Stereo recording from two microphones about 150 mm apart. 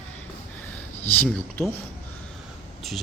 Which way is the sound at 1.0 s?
10° left (ahead or behind).